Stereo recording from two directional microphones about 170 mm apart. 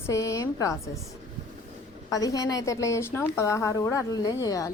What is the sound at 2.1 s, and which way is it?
A woman's voice, 20° left (ahead or behind).